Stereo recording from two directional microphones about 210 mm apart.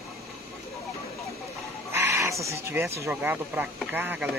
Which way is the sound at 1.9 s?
10° right (ahead or behind).